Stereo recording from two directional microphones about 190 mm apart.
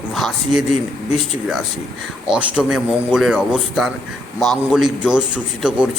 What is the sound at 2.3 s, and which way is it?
A man's voice, 5° right (ahead or behind).